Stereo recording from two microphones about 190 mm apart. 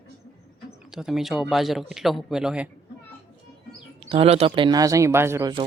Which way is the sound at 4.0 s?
30° right (ahead or behind).